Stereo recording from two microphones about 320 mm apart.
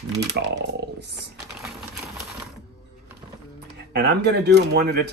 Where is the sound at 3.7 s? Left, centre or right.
Right.